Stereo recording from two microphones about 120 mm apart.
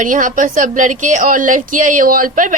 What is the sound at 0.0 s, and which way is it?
A woman's voice, 90° right.